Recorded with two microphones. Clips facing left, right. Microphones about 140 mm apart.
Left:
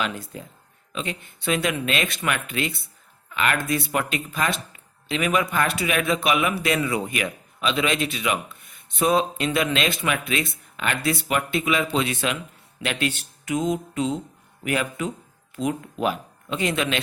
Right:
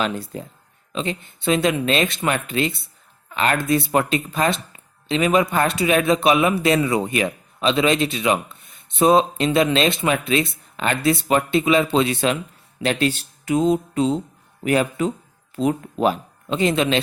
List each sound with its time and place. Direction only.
0.0 s speech: 35° right (ahead or behind)